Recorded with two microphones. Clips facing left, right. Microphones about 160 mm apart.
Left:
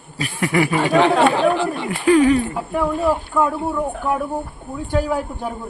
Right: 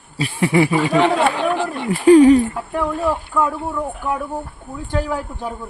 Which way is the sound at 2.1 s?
35° right (ahead or behind).